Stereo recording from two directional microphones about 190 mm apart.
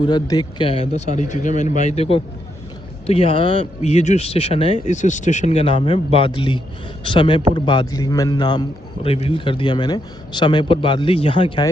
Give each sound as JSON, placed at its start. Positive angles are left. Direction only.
{"t": 0.0, "sound": "a man's voice", "side_deg": 20}